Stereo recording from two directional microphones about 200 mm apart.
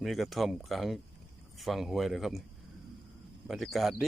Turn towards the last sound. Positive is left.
turn(degrees=0)  # may be behind; listen again after turning